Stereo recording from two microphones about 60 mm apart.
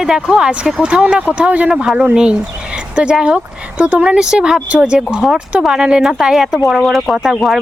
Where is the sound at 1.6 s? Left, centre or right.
Centre.